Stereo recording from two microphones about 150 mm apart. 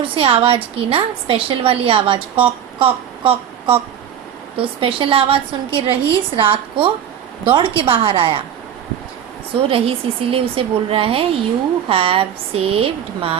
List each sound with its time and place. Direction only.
0.0 s a woman's voice: 35° right (ahead or behind)
9.6 s a woman's voice: 40° right (ahead or behind)